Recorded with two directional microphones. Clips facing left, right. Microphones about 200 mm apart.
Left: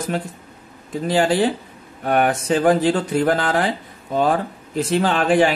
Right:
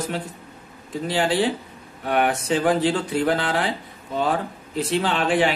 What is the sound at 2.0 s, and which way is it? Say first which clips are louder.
Speech: left 3 dB; 45° left (ahead or behind).